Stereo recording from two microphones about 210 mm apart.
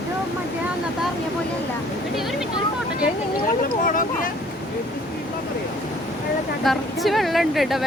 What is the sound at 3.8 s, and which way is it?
Speech, 40° left (ahead or behind).